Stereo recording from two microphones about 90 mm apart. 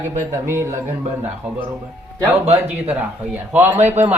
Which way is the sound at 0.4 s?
25° right (ahead or behind).